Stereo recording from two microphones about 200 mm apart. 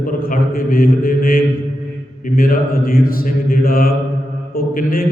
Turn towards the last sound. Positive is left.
turn(degrees=45)  # may be behind; listen again after turning